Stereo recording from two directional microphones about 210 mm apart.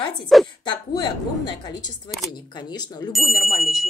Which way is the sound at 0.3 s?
Centre (ahead or behind).